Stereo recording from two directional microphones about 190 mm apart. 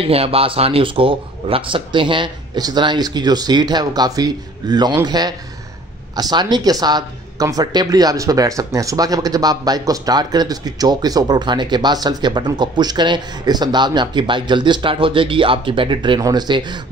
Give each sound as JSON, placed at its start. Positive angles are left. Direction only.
{"t": 0.1, "sound": "speech", "side_deg": -30}